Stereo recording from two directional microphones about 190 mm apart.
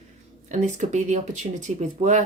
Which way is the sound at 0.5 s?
40° right (ahead or behind).